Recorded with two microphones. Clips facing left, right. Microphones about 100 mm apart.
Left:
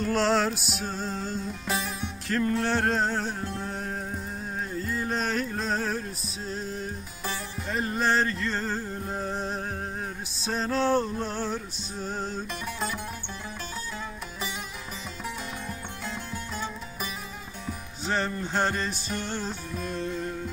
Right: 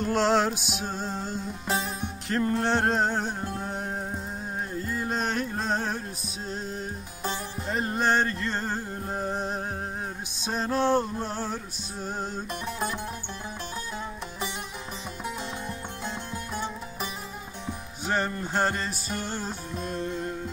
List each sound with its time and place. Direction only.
0.0 s music: 15° right (ahead or behind)
1.7 s music: 35° right (ahead or behind)
4.8 s a sound: 15° right (ahead or behind)
7.2 s music: 30° right (ahead or behind); by 12.3 s 15° right (ahead or behind)
12.6 s music: 30° right (ahead or behind)
16.5 s music: 20° right (ahead or behind)
19.8 s music: 25° right (ahead or behind)